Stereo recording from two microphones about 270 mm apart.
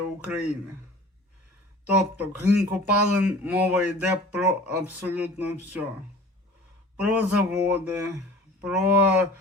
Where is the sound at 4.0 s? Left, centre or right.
Centre.